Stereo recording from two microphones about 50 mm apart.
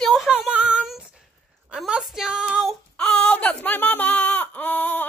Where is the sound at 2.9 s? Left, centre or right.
Left.